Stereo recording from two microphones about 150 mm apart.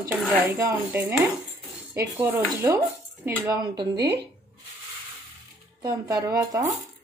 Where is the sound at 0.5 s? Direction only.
15° right (ahead or behind).